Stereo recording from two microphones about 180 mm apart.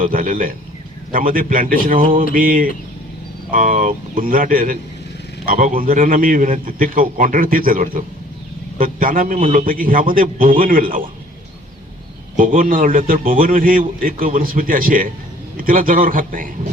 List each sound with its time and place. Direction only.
0.0 s a man's voice: 50° right (ahead or behind)
12.4 s a man's voice: 50° right (ahead or behind)